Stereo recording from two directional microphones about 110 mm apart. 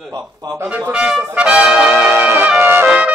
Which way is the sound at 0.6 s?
10° right (ahead or behind).